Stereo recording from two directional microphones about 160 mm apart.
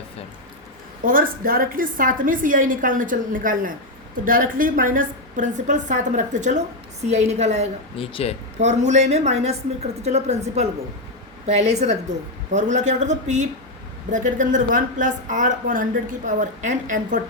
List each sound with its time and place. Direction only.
1.0 s a woman's voice: 60° right (ahead or behind); by 7.7 s 45° right (ahead or behind)
7.9 s speech: 35° left (ahead or behind)
8.6 s a woman's voice: 45° right (ahead or behind)